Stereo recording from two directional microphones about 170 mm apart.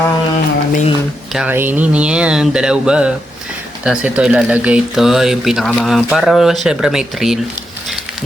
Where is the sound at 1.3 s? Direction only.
5° right (ahead or behind).